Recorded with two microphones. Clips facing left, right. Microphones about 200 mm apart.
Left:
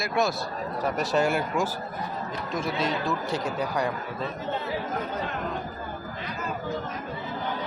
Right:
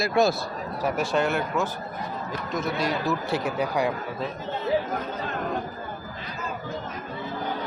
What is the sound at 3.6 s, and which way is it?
Speech, 10° right (ahead or behind).